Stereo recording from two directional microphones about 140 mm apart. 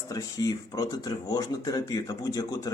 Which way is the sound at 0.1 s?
25° left (ahead or behind).